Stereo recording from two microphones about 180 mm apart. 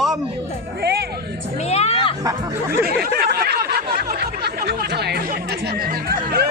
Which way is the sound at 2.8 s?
60° right (ahead or behind).